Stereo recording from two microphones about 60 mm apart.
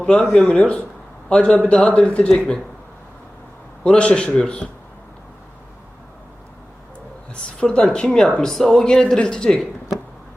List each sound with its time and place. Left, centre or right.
0.0 s speech: centre
3.8 s speech: centre
7.6 s speech: centre